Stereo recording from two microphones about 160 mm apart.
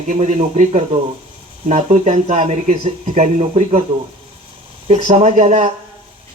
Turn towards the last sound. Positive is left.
turn(degrees=-45)  # may be behind; listen again after turning